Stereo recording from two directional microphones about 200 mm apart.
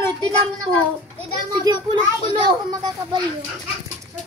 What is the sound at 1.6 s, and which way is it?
Speech, 20° right (ahead or behind).